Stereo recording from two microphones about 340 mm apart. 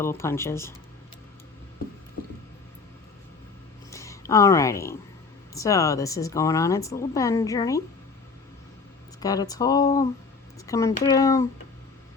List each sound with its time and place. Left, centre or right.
0.0 s speech: centre
3.8 s a sound: centre
5.5 s speech: centre
9.2 s speech: centre